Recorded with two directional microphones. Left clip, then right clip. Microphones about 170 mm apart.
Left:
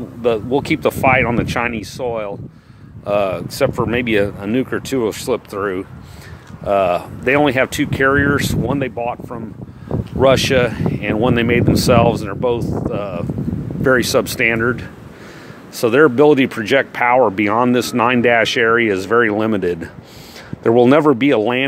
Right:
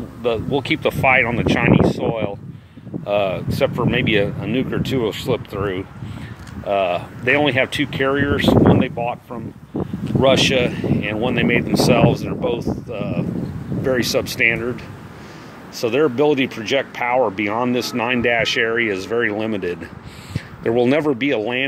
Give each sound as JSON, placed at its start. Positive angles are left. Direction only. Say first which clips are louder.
{"t": 0.2, "sound": "speech", "louder": "left 4 dB", "side_deg": 35}
{"t": 10.2, "sound": "speech", "louder": "left 2 dB", "side_deg": 40}
{"t": 15.8, "sound": "speech", "louder": "left 6 dB", "side_deg": 50}